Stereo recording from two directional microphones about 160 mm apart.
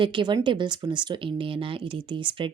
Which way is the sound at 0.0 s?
30° right (ahead or behind).